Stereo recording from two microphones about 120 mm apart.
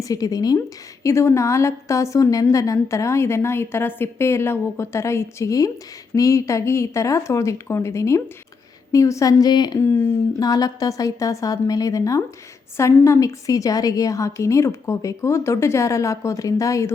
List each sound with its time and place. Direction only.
0.0 s a woman's voice: 30° left (ahead or behind)